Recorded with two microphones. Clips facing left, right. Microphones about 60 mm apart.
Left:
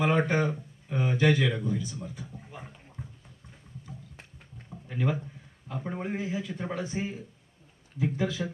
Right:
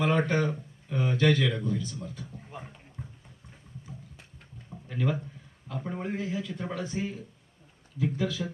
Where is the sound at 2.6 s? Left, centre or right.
Centre.